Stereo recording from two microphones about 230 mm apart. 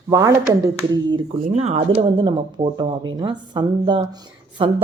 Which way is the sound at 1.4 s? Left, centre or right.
Right.